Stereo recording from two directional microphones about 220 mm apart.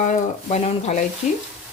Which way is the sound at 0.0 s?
30° left (ahead or behind).